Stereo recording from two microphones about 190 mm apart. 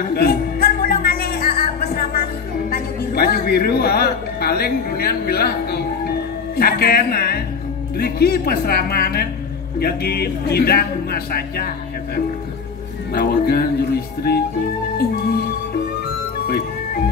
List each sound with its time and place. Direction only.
0.1 s music: 55° left (ahead or behind)
2.7 s a man's voice: 55° left (ahead or behind)
13.1 s speech: 50° left (ahead or behind)